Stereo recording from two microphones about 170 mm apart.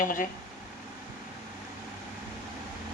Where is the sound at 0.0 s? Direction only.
50° left (ahead or behind).